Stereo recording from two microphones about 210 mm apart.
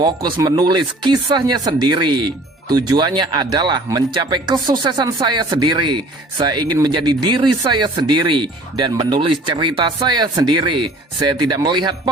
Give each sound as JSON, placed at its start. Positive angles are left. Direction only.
{"t": 0.3, "sound": "speech", "side_deg": -20}